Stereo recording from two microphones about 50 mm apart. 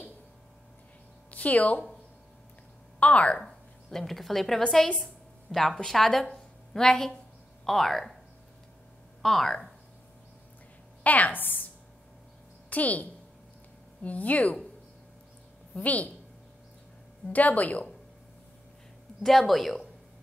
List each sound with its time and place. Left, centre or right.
1.3 s a woman's voice: left
3.0 s a woman's voice: left
3.4 s a woman's voice: centre
6.3 s a sound: centre
7.6 s speech: centre
9.2 s speech: centre
11.1 s speech: left
12.6 s a woman's voice: left
15.7 s a woman's voice: left
17.3 s speech: left
19.2 s speech: centre